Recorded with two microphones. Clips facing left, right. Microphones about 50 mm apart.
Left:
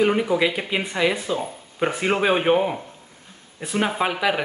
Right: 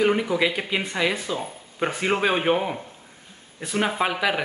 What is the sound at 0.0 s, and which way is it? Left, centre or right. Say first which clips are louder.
Speech: left 2 dB; centre.